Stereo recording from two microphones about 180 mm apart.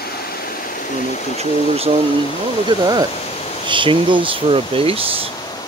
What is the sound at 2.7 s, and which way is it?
Speech, 20° right (ahead or behind).